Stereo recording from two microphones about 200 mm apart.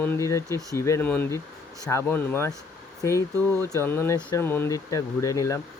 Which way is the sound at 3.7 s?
15° left (ahead or behind).